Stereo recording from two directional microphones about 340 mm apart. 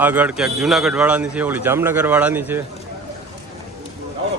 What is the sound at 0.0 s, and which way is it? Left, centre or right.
A man's voice, centre.